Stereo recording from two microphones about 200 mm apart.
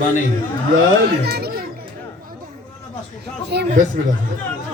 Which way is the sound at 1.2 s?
50° right (ahead or behind).